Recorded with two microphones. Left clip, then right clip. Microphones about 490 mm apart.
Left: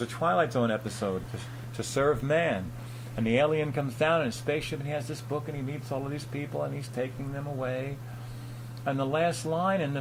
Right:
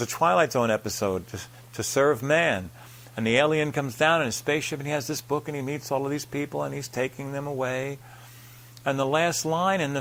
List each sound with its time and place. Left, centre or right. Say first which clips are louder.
0.0 s speech: right 5 dB; right
6.1 s speech: right 6 dB; right